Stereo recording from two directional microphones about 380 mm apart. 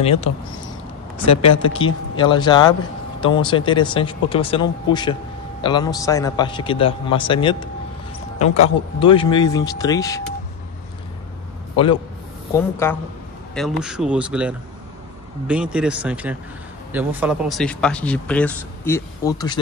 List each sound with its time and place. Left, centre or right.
0.0 s a man's voice: centre
2.1 s a man's voice: centre
11.7 s a man's voice: centre